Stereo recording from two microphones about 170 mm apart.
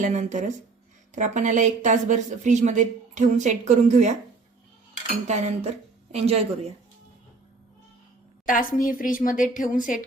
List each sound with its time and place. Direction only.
0.0 s a woman's voice: 45° right (ahead or behind)
8.4 s a woman's voice: 55° left (ahead or behind)